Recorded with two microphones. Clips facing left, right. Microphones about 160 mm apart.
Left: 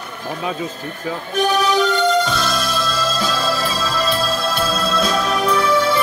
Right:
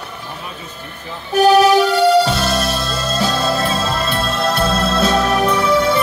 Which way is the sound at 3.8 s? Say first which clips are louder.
Even; 60° right (ahead or behind).